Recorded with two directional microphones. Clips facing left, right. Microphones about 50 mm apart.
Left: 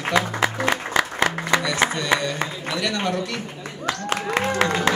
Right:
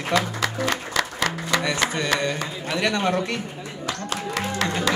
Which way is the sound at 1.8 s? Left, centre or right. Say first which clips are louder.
Left 3 dB; left.